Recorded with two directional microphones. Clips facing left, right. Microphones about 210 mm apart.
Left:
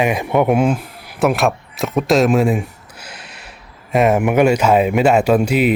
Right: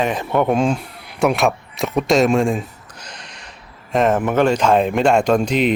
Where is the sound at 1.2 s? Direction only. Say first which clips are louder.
Left 1 dB; centre (ahead or behind).